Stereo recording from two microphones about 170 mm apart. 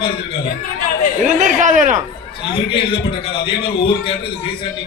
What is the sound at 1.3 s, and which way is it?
Speech, 45° right (ahead or behind).